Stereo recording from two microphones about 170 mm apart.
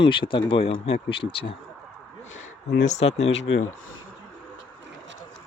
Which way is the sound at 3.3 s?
90° left.